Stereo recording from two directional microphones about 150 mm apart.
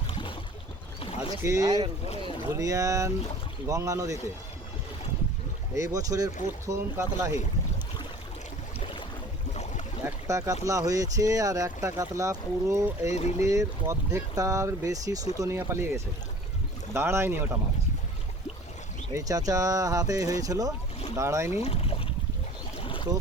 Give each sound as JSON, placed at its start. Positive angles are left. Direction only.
{"t": 0.1, "sound": "boat", "side_deg": 35}
{"t": 1.4, "sound": "speech", "side_deg": -20}
{"t": 5.7, "sound": "speech", "side_deg": -20}
{"t": 8.8, "sound": "a sound", "side_deg": 35}
{"t": 9.5, "sound": "a sound", "side_deg": 50}
{"t": 10.0, "sound": "speech", "side_deg": -20}
{"t": 13.1, "sound": "speech", "side_deg": 50}
{"t": 13.5, "sound": "speech", "side_deg": -20}
{"t": 19.1, "sound": "speech", "side_deg": -25}
{"t": 21.6, "sound": "speech", "side_deg": 40}
{"t": 22.8, "sound": "boat", "side_deg": 35}